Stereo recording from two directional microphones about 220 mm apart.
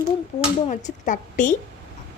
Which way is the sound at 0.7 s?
35° left (ahead or behind).